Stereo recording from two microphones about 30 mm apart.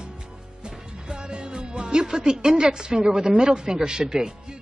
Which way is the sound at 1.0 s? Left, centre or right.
Right.